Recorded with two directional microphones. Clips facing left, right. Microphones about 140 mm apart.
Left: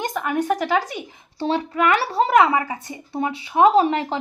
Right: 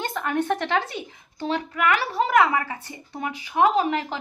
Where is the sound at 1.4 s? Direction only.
30° left (ahead or behind).